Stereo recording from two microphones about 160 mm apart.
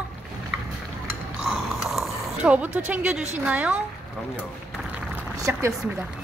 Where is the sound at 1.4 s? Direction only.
Centre (ahead or behind).